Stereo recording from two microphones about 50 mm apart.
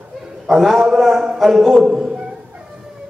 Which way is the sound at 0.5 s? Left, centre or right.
Centre.